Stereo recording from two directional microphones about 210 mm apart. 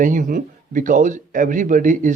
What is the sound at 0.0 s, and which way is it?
Speech, 40° right (ahead or behind).